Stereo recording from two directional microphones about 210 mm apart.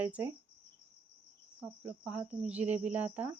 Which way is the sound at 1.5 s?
5° right (ahead or behind).